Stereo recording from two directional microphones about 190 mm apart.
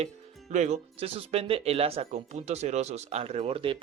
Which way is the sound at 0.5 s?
35° right (ahead or behind).